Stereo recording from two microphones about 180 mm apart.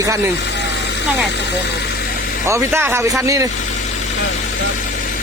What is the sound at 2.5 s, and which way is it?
Speech, 15° right (ahead or behind).